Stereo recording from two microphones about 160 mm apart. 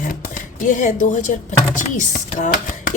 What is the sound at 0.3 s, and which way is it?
Speech, 55° left (ahead or behind).